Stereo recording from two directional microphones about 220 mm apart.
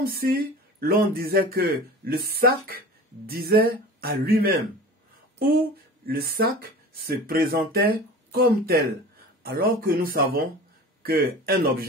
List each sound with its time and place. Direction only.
0.0 s speech: 45° right (ahead or behind)
6.0 s speech: 45° right (ahead or behind)